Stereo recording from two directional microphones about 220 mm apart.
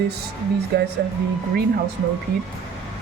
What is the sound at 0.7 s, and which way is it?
Speech, 50° right (ahead or behind).